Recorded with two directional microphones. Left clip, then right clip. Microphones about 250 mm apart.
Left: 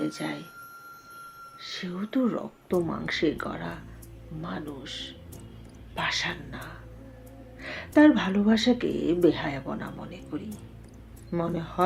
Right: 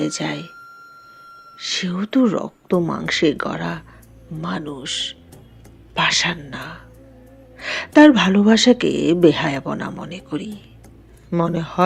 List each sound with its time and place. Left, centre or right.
0.0 s speech: right
1.5 s speech: right